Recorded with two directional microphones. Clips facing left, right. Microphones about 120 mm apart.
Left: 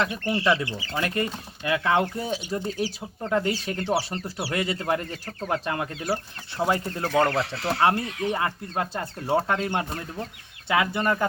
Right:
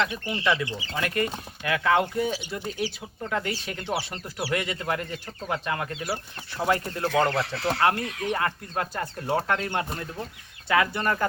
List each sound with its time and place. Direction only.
0.0 s speech: 40° left (ahead or behind)
6.7 s speech: 20° left (ahead or behind)